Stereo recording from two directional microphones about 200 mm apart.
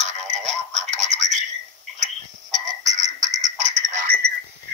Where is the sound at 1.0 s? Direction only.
35° right (ahead or behind).